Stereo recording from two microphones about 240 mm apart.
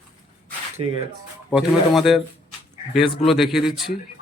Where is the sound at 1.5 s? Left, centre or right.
Centre.